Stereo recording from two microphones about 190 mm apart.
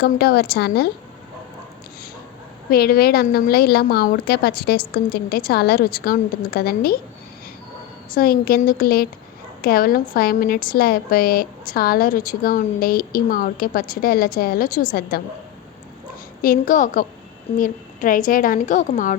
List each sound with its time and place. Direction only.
0.0 s a woman's voice: 55° left (ahead or behind)
2.6 s a woman's voice: 55° left (ahead or behind)
8.1 s a woman's voice: 50° left (ahead or behind)
16.4 s a woman's voice: 45° left (ahead or behind)